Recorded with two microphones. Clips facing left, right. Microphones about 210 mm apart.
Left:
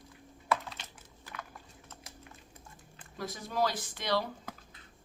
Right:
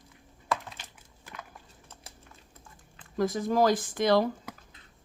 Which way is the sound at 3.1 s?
50° right (ahead or behind).